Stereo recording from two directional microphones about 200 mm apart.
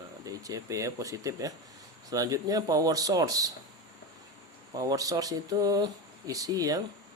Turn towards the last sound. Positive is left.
turn(degrees=-15)  # may be behind; listen again after turning